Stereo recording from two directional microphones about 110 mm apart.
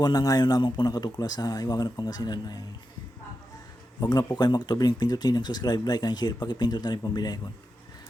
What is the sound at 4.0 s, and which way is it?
Speech, 35° left (ahead or behind).